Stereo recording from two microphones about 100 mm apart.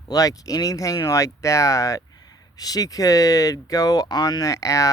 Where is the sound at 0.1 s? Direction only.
35° left (ahead or behind).